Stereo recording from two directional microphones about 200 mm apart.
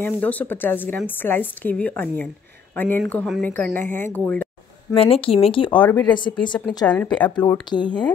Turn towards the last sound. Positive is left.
turn(degrees=20)  # may be behind; listen again after turning